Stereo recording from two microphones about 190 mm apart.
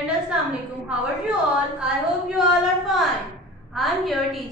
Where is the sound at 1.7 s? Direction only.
Centre (ahead or behind).